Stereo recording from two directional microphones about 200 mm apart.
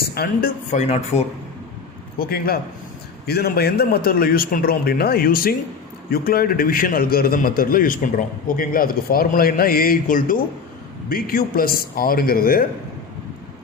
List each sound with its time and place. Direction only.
0.0 s speech: 50° left (ahead or behind)
0.7 s speech: 35° left (ahead or behind)
2.1 s a man's voice: 50° left (ahead or behind)